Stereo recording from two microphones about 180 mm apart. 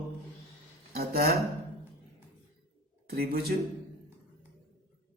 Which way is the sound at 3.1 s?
60° right (ahead or behind).